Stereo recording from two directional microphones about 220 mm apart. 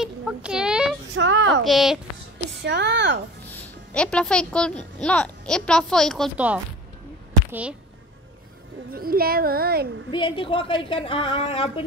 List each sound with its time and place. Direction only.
0.0 s a sound: 5° right (ahead or behind)
1.1 s a sound: 60° right (ahead or behind)
1.6 s speech: centre (ahead or behind)
2.3 s speech: 50° right (ahead or behind)
3.9 s speech: 5° left (ahead or behind)
8.9 s a child's voice: 40° right (ahead or behind)
10.1 s a woman's voice: 25° left (ahead or behind)